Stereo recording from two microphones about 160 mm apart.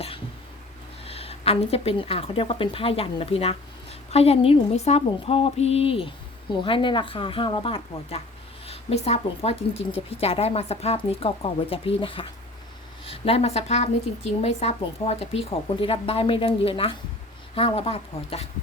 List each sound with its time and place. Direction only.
1.0 s a woman's voice: 40° left (ahead or behind)